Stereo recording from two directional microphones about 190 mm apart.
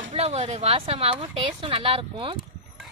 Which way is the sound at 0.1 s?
30° right (ahead or behind).